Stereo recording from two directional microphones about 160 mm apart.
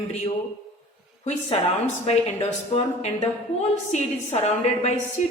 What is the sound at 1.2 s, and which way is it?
A woman's voice, 40° left (ahead or behind).